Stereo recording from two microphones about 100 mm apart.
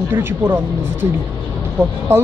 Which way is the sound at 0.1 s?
20° right (ahead or behind).